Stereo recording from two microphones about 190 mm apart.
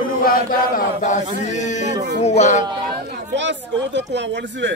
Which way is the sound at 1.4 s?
40° left (ahead or behind).